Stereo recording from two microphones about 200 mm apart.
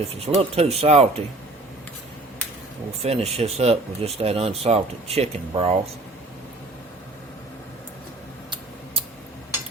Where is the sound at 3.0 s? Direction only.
30° right (ahead or behind).